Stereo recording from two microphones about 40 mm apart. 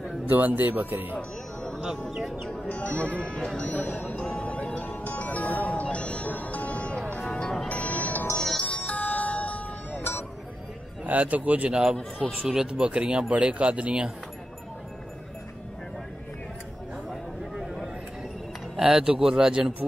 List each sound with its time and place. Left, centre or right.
0.3 s speech: right
1.1 s music: left
2.6 s speech: left
4.3 s music: left
4.7 s music: left
6.2 s music: left
8.4 s music: centre
8.6 s music: left
9.9 s music: left
11.1 s speech: right
11.7 s speech: centre
17.1 s a sound: centre
18.8 s speech: centre